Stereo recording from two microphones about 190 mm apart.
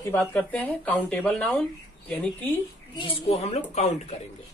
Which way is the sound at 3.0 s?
30° left (ahead or behind).